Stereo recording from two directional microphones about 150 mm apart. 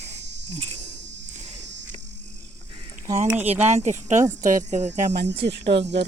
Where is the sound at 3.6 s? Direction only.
50° right (ahead or behind).